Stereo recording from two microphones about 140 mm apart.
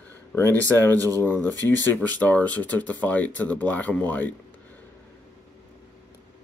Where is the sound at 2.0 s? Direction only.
10° left (ahead or behind).